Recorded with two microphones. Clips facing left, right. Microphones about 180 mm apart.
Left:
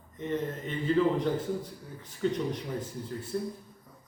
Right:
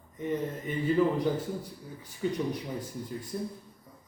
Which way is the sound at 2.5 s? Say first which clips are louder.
Even; 10° right (ahead or behind).